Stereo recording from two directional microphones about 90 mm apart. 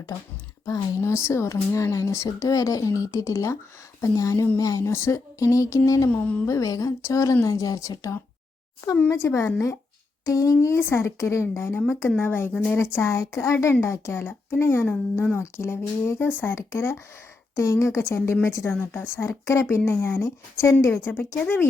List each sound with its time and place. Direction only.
0.6 s speech: 35° left (ahead or behind)
6.1 s speech: 15° left (ahead or behind)
6.5 s speech: 40° left (ahead or behind); by 15.4 s 20° left (ahead or behind)
15.5 s speech: 30° left (ahead or behind)
21.3 s speech: 20° left (ahead or behind)